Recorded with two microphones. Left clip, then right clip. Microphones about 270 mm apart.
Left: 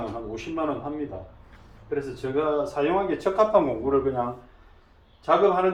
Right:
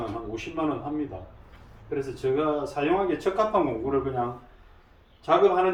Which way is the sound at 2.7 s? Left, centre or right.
Centre.